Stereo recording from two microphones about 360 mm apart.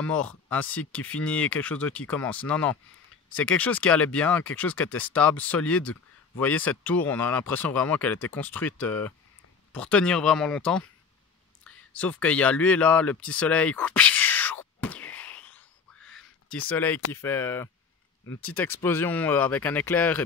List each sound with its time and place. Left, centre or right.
0.0 s speech: centre
14.8 s a sound: centre
17.1 s speech: centre